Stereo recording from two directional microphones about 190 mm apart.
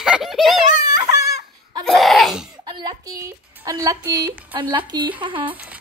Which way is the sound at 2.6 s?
20° right (ahead or behind).